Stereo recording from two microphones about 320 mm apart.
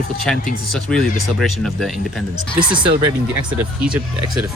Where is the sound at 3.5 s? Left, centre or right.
Centre.